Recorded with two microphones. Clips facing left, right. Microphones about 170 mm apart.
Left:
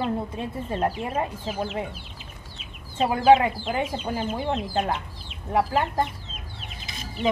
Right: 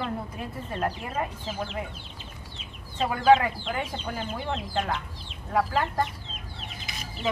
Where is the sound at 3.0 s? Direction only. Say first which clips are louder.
Left 3 dB; 25° left (ahead or behind).